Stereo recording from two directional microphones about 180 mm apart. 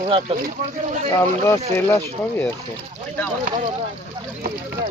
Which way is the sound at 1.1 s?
15° left (ahead or behind).